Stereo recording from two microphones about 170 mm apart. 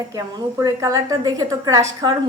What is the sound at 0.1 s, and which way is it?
A woman's voice, 20° right (ahead or behind).